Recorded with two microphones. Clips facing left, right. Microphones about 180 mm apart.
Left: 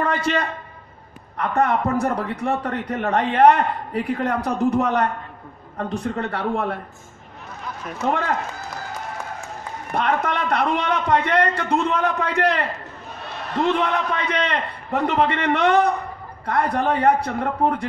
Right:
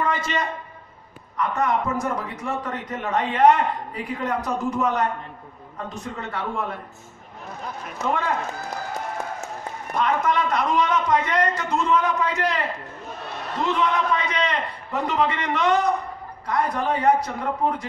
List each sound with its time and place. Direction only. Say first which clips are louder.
0.0 s a man's voice: left 3 dB; 65° left (ahead or behind)
9.9 s a man's voice: even; 65° left (ahead or behind)